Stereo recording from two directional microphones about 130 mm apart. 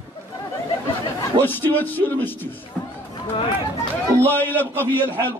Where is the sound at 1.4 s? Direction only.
15° left (ahead or behind).